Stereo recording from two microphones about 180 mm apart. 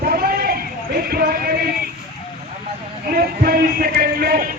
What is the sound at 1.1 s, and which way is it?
Music, 55° right (ahead or behind).